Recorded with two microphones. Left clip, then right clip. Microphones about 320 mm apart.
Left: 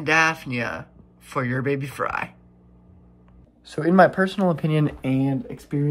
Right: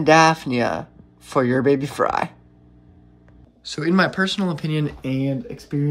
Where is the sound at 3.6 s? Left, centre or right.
Centre.